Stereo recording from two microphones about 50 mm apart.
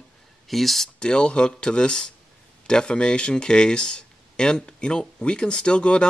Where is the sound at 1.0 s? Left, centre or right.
Centre.